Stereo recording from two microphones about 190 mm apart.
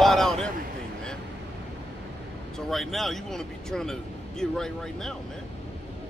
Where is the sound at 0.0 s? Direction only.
Centre (ahead or behind).